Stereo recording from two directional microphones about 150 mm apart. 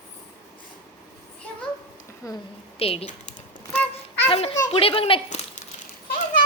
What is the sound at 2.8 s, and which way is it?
Typing, 40° left (ahead or behind).